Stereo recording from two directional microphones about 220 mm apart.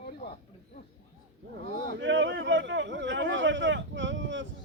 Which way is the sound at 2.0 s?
55° right (ahead or behind).